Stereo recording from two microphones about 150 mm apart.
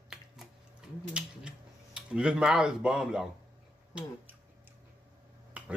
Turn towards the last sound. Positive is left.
turn(degrees=-10)  # may be behind; listen again after turning